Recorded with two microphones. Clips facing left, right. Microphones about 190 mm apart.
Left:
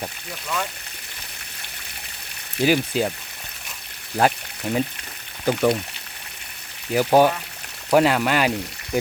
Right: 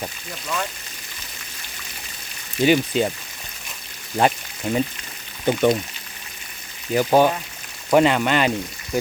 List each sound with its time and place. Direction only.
0.0 s speech: centre (ahead or behind)
2.6 s speech: centre (ahead or behind)
4.2 s speech: centre (ahead or behind)
6.9 s speech: 5° left (ahead or behind)